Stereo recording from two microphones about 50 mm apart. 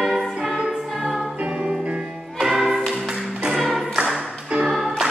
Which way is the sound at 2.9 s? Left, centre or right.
Centre.